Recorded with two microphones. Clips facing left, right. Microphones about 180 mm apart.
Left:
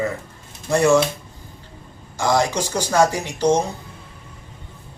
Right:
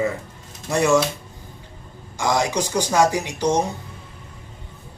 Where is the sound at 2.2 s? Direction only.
15° right (ahead or behind).